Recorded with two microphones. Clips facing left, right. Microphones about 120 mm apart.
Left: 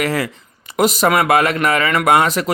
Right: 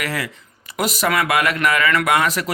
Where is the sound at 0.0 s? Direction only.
30° left (ahead or behind).